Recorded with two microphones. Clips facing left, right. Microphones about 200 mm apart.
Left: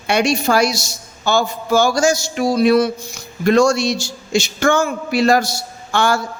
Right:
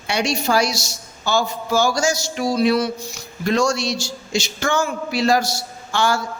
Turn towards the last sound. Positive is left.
turn(degrees=55)  # may be behind; listen again after turning